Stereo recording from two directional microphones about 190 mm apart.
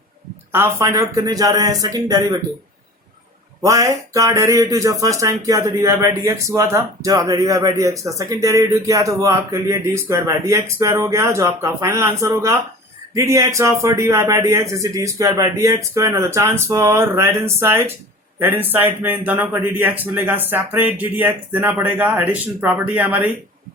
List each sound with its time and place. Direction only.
0.5 s a man's voice: 15° right (ahead or behind)
3.6 s a man's voice: 15° right (ahead or behind)